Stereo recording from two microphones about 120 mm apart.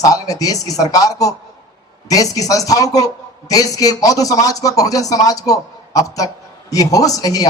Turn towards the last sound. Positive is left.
turn(degrees=30)  # may be behind; listen again after turning